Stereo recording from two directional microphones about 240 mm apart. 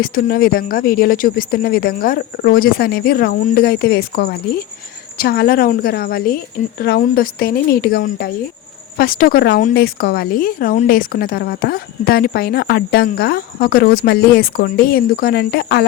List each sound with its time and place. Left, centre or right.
0.0 s speech: left